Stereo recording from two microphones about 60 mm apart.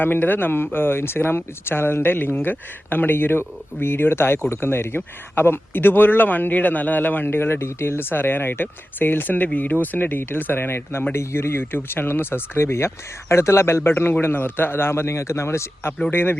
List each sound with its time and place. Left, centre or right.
0.0 s speech: left
16.1 s speech: left